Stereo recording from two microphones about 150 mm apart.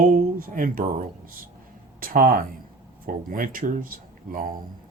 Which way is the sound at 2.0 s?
70° right (ahead or behind).